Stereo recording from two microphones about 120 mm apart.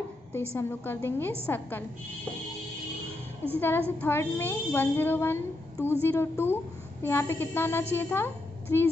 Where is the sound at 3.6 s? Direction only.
20° left (ahead or behind).